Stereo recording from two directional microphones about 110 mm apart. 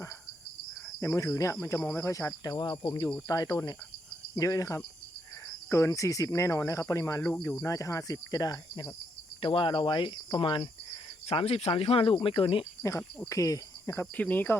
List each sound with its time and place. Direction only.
1.0 s speech: 25° left (ahead or behind)
2.8 s cricket: 40° left (ahead or behind)
4.4 s speech: 30° left (ahead or behind)
7.6 s cricket: 30° left (ahead or behind)
9.4 s cricket: 50° left (ahead or behind)
11.3 s speech: 65° left (ahead or behind)
13.3 s cricket: 30° left (ahead or behind)
14.2 s speech: 15° left (ahead or behind)